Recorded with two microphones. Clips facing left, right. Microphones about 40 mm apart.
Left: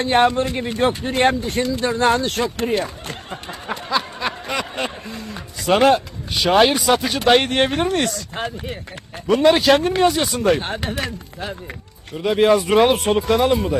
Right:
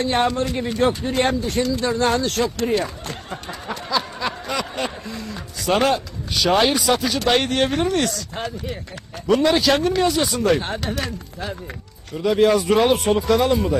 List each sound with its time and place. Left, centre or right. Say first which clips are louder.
0.0 s speech: left 4 dB; left
5.1 s vehicle: even; left
6.6 s speech: left 3 dB; left